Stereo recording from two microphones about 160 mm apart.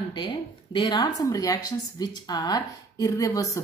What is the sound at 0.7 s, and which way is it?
Speech, 25° left (ahead or behind).